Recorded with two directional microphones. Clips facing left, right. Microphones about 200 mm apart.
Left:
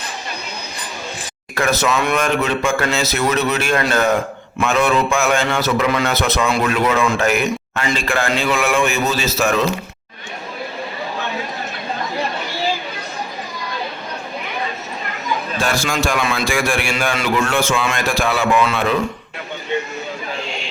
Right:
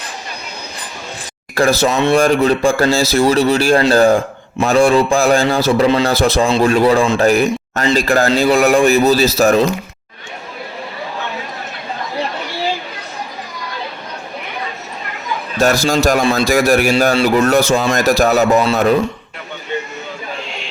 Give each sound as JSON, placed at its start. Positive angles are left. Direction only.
{"t": 1.5, "sound": "a man's voice", "side_deg": -35}
{"t": 15.5, "sound": "a man's voice", "side_deg": -40}
{"t": 20.4, "sound": "a sound", "side_deg": 0}